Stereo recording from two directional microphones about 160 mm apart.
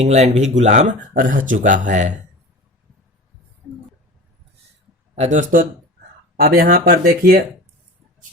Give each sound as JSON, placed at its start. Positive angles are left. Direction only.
{"t": 0.0, "sound": "speech", "side_deg": -45}
{"t": 5.1, "sound": "speech", "side_deg": -45}
{"t": 6.3, "sound": "speech", "side_deg": -70}